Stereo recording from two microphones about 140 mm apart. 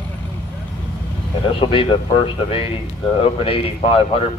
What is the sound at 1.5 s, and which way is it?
Speech, 40° left (ahead or behind).